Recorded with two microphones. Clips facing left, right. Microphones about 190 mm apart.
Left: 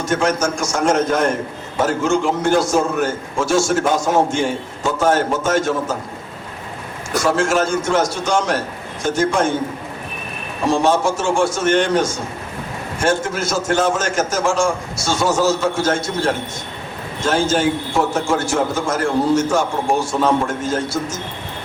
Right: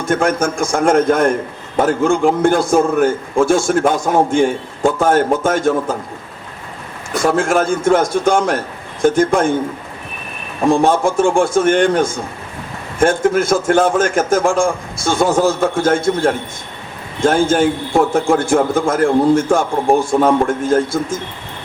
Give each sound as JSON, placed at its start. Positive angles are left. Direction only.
{"t": 0.0, "sound": "a man's voice", "side_deg": -55}
{"t": 7.2, "sound": "a man's voice", "side_deg": -55}
{"t": 10.7, "sound": "a man's voice", "side_deg": -55}